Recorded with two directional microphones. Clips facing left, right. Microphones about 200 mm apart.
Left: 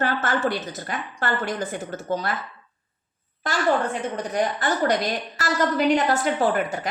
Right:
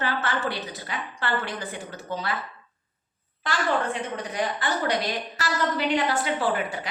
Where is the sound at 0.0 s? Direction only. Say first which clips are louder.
Left 4 dB; 45° left (ahead or behind).